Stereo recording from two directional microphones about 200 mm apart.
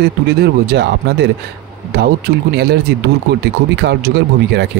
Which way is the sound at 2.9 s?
55° right (ahead or behind).